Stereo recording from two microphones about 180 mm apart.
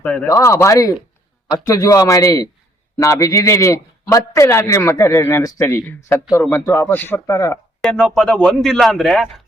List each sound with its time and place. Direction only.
0.0 s a man's voice: 5° left (ahead or behind)
0.3 s a man's voice: 15° left (ahead or behind)
7.8 s a man's voice: 5° left (ahead or behind)